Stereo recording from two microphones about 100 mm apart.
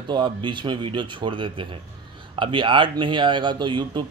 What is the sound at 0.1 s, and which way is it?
A man's voice, 55° right (ahead or behind).